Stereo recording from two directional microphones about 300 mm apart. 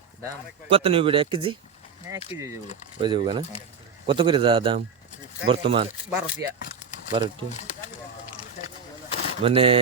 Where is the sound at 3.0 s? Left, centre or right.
Centre.